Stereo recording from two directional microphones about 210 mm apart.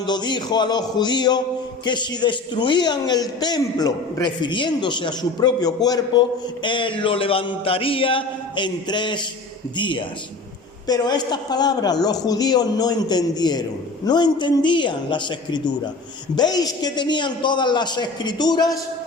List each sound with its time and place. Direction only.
0.0 s a man's voice: 20° left (ahead or behind)